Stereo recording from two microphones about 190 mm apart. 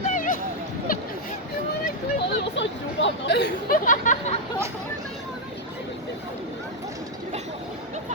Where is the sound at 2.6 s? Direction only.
70° left (ahead or behind); by 4.4 s 40° left (ahead or behind).